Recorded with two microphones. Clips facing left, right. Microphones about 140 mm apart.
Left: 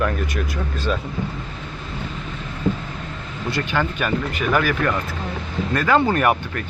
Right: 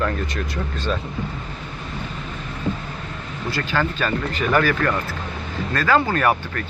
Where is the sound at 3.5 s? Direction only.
15° left (ahead or behind).